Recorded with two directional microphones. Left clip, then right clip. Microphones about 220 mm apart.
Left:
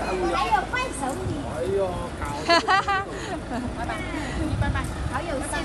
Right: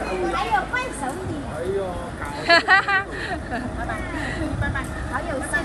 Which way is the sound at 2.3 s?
10° left (ahead or behind).